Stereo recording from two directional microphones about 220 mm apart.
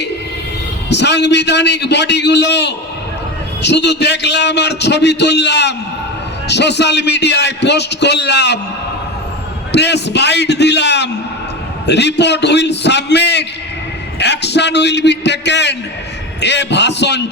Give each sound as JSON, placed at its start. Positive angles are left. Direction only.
{"t": 0.9, "sound": "a man's voice", "side_deg": 50}
{"t": 9.7, "sound": "a man's voice", "side_deg": 50}